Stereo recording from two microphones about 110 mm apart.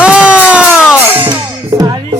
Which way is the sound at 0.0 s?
10° right (ahead or behind).